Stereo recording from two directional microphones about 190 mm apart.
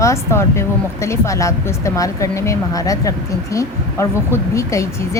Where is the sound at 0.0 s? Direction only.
15° left (ahead or behind).